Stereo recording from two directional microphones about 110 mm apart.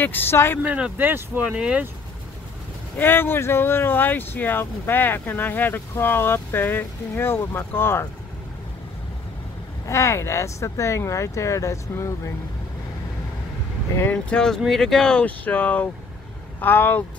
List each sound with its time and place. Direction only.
0.0 s speech: 20° left (ahead or behind)
0.6 s speech: 10° right (ahead or behind)
3.0 s speech: 20° left (ahead or behind)
9.8 s speech: 25° left (ahead or behind)
14.0 s speech: 5° left (ahead or behind)